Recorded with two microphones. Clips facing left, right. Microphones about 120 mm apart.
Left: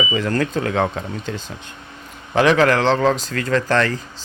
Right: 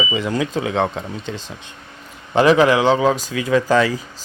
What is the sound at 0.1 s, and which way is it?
Speech, 5° right (ahead or behind).